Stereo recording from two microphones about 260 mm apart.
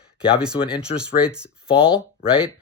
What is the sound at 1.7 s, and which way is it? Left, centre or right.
Speech, centre.